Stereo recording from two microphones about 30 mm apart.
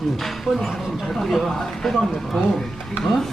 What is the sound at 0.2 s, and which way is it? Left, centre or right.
Speech, centre.